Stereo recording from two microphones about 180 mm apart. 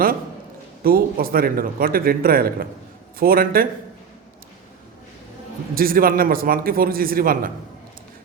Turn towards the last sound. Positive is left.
turn(degrees=-50)  # may be behind; listen again after turning